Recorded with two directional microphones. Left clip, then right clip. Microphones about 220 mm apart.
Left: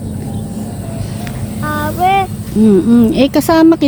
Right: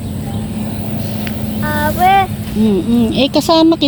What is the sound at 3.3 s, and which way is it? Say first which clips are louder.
Speech: right 3 dB; 15° left (ahead or behind).